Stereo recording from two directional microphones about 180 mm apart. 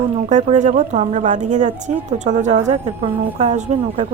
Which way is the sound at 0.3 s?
45° right (ahead or behind).